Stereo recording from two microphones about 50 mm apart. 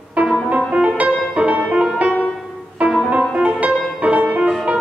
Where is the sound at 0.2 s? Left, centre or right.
Right.